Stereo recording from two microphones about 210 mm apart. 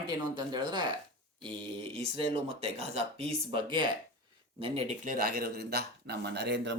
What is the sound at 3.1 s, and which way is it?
Speech, 25° right (ahead or behind).